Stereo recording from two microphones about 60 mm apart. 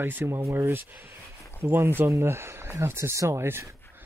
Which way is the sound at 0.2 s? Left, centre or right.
Right.